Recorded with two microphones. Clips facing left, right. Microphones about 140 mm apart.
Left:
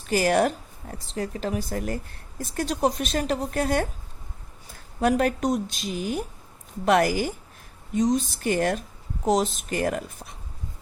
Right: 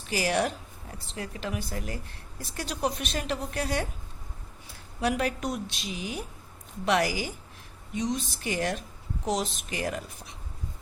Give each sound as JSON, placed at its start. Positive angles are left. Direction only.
{"t": 0.1, "sound": "a woman's voice", "side_deg": 50}
{"t": 4.9, "sound": "a woman's voice", "side_deg": 45}